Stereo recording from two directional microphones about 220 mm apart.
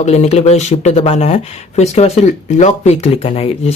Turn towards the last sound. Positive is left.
turn(degrees=30)  # may be behind; listen again after turning